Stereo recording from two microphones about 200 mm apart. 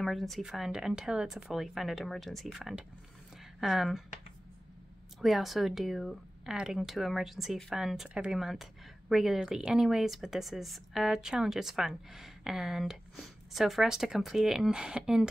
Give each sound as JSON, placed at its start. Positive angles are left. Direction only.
{"t": 0.0, "sound": "speech", "side_deg": 0}
{"t": 5.2, "sound": "speech", "side_deg": 0}